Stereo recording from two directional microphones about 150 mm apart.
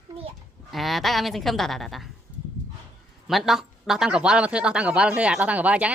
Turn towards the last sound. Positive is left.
turn(degrees=-10)  # may be behind; listen again after turning